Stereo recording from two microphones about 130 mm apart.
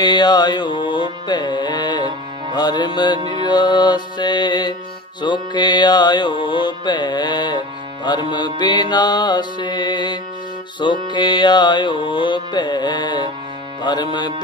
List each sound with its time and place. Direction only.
0.0 s music: 35° left (ahead or behind)